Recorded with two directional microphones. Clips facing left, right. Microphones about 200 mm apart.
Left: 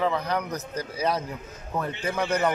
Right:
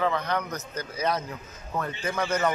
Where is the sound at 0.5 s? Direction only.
35° left (ahead or behind).